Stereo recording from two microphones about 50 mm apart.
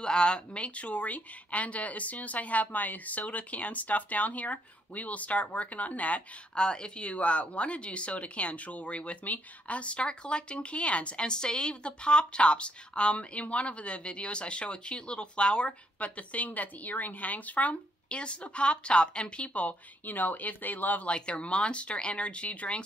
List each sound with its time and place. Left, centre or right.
0.0 s speech: centre
6.5 s speech: centre; by 21.1 s left
21.1 s speech: left